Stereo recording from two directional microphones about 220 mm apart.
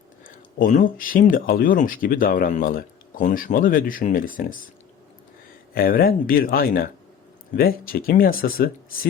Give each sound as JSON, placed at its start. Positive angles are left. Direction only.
{"t": 0.3, "sound": "speech", "side_deg": 35}
{"t": 5.7, "sound": "speech", "side_deg": 40}